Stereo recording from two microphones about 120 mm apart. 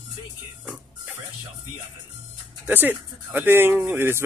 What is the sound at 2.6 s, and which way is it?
Speech, 15° right (ahead or behind).